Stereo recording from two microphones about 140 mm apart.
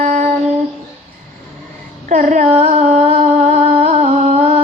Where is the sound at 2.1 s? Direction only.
60° right (ahead or behind).